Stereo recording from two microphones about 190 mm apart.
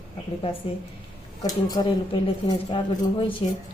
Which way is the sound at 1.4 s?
20° left (ahead or behind).